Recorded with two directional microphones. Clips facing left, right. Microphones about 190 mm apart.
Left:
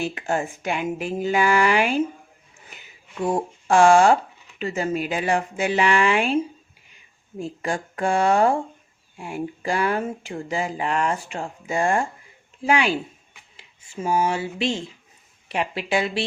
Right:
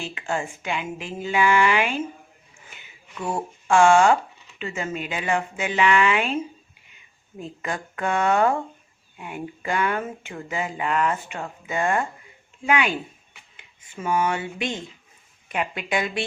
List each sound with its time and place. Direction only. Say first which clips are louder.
0.1 s speech: left 3 dB; 40° left (ahead or behind)
7.6 s speech: left 3 dB; 30° left (ahead or behind)
14.0 s speech: left 1 dB; 30° left (ahead or behind)